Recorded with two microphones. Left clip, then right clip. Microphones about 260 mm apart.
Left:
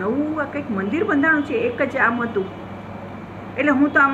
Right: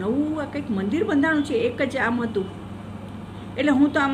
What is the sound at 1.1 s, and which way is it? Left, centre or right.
A woman's voice, centre.